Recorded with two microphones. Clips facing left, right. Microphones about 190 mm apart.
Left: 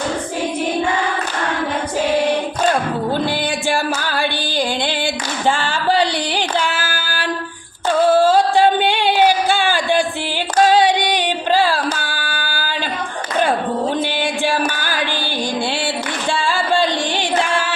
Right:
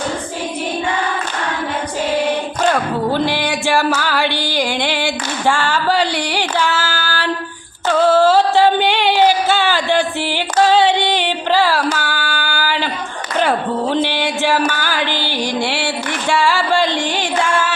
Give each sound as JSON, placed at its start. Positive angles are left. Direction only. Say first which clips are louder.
{"t": 3.8, "sound": "music", "louder": "right 4 dB", "side_deg": 15}
{"t": 5.5, "sound": "female singing", "louder": "right 1 dB", "side_deg": 20}
{"t": 8.1, "sound": "a sound", "louder": "right 1 dB", "side_deg": 15}
{"t": 10.7, "sound": "female singing", "louder": "right 2 dB", "side_deg": 15}
{"t": 14.7, "sound": "music", "louder": "right 3 dB", "side_deg": 15}
{"t": 14.9, "sound": "music", "louder": "right 2 dB", "side_deg": -20}
{"t": 16.6, "sound": "music", "louder": "right 1 dB", "side_deg": 15}